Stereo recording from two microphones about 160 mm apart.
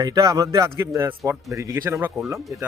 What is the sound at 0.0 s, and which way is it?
Speech, 20° right (ahead or behind).